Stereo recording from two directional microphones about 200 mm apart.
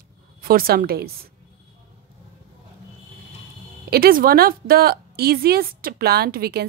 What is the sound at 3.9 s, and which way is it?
Speech, 45° right (ahead or behind).